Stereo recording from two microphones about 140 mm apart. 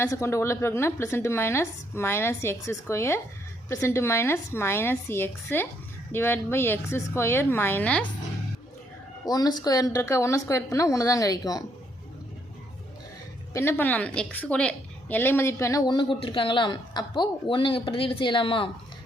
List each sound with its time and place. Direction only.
0.0 s a woman's voice: 20° left (ahead or behind)
9.2 s a woman's voice: 25° left (ahead or behind)
13.5 s a woman's voice: 20° left (ahead or behind); by 18.7 s 40° left (ahead or behind)